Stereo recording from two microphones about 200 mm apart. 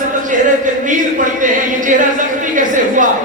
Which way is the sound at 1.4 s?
40° right (ahead or behind).